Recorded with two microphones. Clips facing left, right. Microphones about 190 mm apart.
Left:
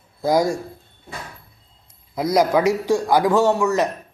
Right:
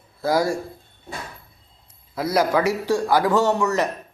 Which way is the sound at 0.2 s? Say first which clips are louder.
Left 2 dB; 15° left (ahead or behind).